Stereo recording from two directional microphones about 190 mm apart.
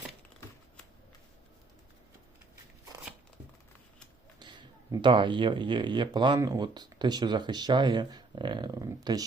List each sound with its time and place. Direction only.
4.4 s speech: 25° right (ahead or behind)